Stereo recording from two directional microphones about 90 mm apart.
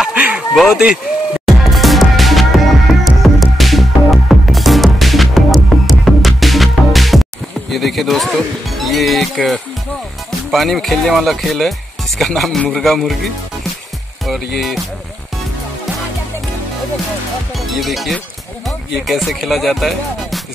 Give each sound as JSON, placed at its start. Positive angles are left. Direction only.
{"t": 0.0, "sound": "a sound", "side_deg": -15}
{"t": 0.6, "sound": "speech", "side_deg": -10}
{"t": 1.6, "sound": "music", "side_deg": 0}
{"t": 7.7, "sound": "speech", "side_deg": 0}
{"t": 17.6, "sound": "speech", "side_deg": 0}